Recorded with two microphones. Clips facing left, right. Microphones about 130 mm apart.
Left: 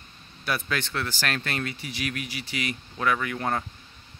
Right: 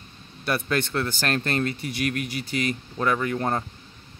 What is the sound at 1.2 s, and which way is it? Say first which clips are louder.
Speech: right 6 dB; 40° right (ahead or behind).